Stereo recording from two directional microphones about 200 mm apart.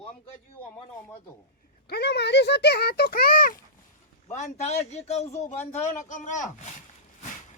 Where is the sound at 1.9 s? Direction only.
55° left (ahead or behind).